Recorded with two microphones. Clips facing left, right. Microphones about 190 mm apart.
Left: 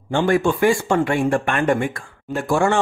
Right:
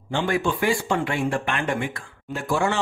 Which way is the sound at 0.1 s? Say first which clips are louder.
Left 6 dB; 45° left (ahead or behind).